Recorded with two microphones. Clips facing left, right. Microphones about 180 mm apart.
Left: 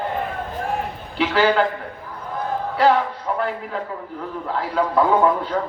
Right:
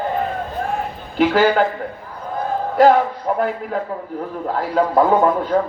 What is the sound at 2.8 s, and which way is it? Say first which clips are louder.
A man's voice: right 5 dB; 45° right (ahead or behind).